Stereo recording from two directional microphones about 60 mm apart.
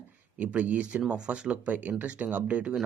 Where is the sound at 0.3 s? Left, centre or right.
Right.